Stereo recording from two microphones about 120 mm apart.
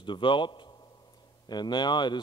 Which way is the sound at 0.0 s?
45° left (ahead or behind).